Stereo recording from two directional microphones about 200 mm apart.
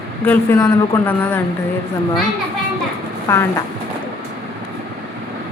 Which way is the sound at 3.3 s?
15° left (ahead or behind).